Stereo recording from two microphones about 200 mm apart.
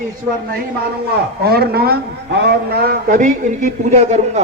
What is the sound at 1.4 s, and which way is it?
A man's voice, 50° right (ahead or behind).